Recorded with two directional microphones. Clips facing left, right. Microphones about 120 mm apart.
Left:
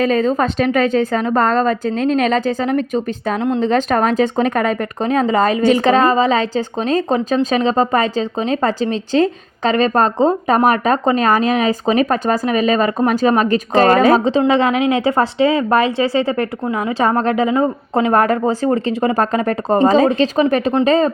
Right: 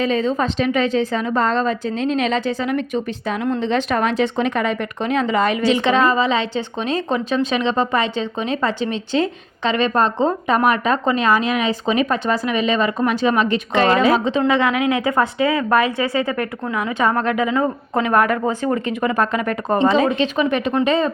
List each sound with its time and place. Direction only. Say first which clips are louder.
0.0 s a woman's voice: left 4 dB; 50° left (ahead or behind)